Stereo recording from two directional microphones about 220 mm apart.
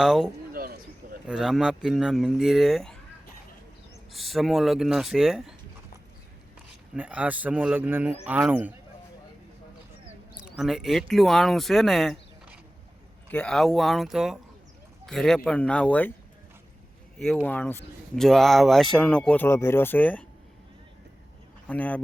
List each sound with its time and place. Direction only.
0.0 s speech: centre (ahead or behind)
0.5 s a sound: 40° right (ahead or behind)
1.3 s speech: centre (ahead or behind)
4.1 s speech: centre (ahead or behind)
6.9 s speech: 5° right (ahead or behind)
10.6 s speech: centre (ahead or behind)
17.2 s speech: 5° left (ahead or behind)
21.7 s speech: 5° left (ahead or behind)